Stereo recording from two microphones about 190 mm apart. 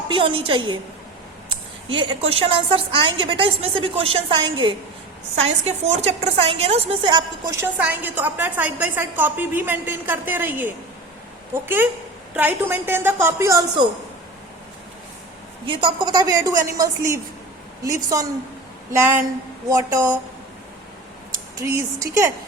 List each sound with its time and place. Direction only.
0.1 s a woman's voice: 25° right (ahead or behind)
5.4 s a woman's voice: 35° right (ahead or behind); by 13.8 s 15° right (ahead or behind)
15.6 s a woman's voice: 25° right (ahead or behind)
21.5 s a woman's voice: 15° right (ahead or behind)